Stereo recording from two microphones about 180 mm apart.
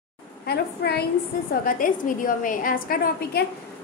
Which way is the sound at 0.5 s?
65° left (ahead or behind).